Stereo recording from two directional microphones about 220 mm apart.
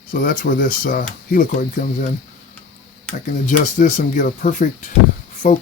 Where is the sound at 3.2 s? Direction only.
35° left (ahead or behind).